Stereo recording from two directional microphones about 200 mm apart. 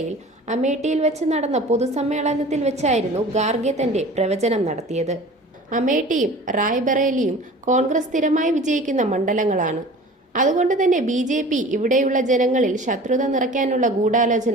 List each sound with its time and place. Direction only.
0.4 s a woman's voice: 35° right (ahead or behind)